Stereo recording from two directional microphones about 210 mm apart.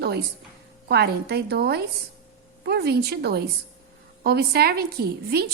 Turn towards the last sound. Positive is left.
turn(degrees=-50)  # may be behind; listen again after turning